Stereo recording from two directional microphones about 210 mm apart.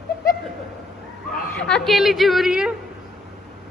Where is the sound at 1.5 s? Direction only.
5° left (ahead or behind).